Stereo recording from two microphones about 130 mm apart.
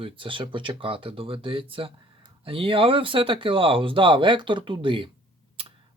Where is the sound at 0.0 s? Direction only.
40° right (ahead or behind).